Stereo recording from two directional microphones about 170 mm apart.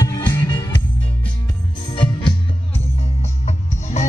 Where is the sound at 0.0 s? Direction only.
20° left (ahead or behind).